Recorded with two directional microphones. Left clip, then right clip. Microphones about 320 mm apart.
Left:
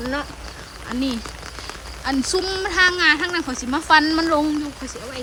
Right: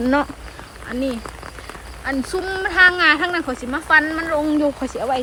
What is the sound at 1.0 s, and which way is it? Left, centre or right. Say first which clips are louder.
A woman's voice: right 2 dB; centre.